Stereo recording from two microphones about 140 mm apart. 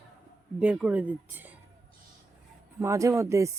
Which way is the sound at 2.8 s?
20° right (ahead or behind).